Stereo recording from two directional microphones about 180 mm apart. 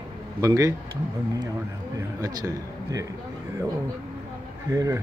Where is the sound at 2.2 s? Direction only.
20° right (ahead or behind).